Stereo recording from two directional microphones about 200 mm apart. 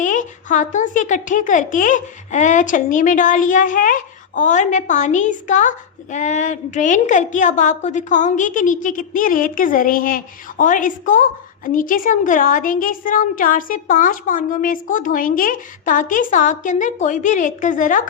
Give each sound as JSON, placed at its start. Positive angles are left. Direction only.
{"t": 0.0, "sound": "speech", "side_deg": 40}